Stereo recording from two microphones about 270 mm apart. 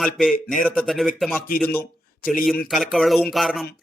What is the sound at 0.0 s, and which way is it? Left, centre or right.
Speech, centre.